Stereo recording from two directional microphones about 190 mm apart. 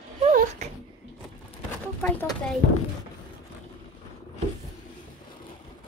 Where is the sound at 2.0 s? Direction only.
5° left (ahead or behind).